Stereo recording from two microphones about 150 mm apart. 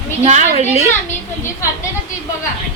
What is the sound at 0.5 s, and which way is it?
Speech, 45° left (ahead or behind).